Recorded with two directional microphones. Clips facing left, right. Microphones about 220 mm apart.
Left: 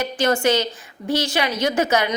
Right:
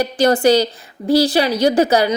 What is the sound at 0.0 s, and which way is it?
A woman's voice, 35° right (ahead or behind).